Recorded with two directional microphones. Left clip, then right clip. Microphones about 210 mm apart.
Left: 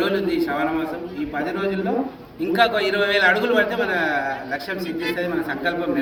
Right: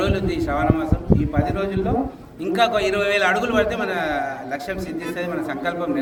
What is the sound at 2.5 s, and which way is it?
A man's voice, 35° right (ahead or behind).